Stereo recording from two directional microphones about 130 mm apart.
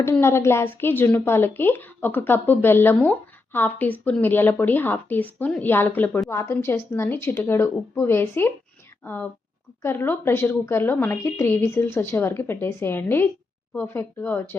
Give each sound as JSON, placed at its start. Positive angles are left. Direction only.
{"t": 0.0, "sound": "a woman's voice", "side_deg": 20}
{"t": 9.8, "sound": "speech", "side_deg": 20}